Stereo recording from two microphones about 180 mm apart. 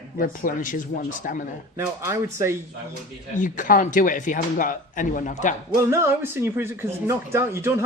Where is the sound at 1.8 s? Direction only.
15° right (ahead or behind).